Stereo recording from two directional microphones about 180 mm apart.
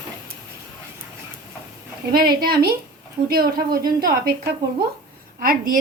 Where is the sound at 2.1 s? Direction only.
55° right (ahead or behind).